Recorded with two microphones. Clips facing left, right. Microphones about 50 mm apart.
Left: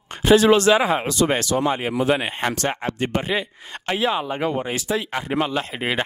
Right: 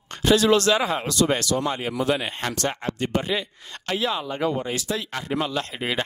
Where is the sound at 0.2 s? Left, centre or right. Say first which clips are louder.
Left 4 dB; left.